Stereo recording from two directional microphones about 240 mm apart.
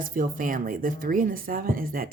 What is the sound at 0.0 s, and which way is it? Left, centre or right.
A woman's voice, right.